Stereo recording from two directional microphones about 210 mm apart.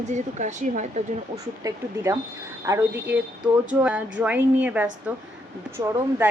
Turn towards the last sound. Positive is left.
turn(degrees=-10)  # may be behind; listen again after turning